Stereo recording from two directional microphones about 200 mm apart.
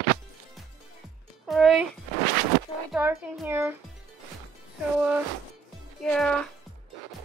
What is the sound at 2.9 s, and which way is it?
Speech, 5° right (ahead or behind).